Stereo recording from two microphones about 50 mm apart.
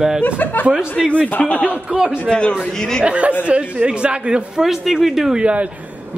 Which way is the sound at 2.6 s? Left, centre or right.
Centre.